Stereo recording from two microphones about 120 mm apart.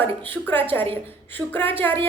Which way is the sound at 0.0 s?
15° left (ahead or behind).